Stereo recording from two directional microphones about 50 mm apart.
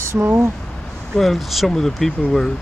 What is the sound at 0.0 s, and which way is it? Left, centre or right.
Speech, right.